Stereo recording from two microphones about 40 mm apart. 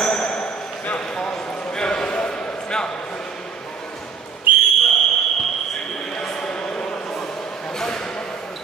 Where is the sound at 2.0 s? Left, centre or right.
Left.